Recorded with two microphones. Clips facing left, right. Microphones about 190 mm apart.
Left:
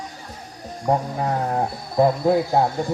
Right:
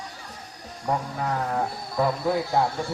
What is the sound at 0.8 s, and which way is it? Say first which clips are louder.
A man's voice: left 5 dB; 35° left (ahead or behind).